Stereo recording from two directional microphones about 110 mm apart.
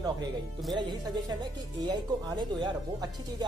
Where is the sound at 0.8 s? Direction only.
45° right (ahead or behind).